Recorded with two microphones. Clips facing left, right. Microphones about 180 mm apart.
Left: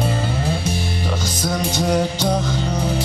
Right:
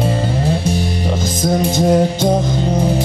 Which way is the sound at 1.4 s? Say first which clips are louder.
Right 7 dB; 25° right (ahead or behind).